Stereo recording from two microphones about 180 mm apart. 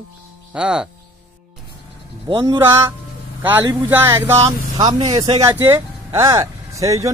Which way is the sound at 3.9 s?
15° right (ahead or behind).